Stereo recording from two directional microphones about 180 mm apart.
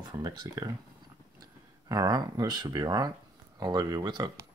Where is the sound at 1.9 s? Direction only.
20° right (ahead or behind).